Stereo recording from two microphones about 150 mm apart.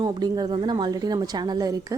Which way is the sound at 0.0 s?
25° right (ahead or behind).